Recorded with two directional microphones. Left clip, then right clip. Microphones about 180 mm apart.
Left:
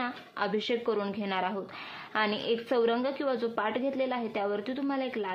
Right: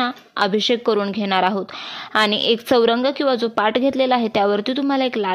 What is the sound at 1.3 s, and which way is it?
A woman's voice, 55° right (ahead or behind).